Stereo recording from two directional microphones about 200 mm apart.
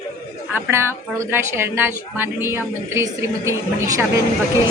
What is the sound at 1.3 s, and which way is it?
A woman's voice, 10° right (ahead or behind).